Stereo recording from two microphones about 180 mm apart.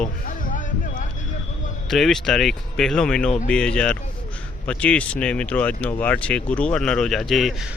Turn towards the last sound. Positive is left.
turn(degrees=0)  # may be behind; listen again after turning